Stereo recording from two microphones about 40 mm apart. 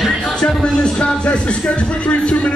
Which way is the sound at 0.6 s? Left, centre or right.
Left.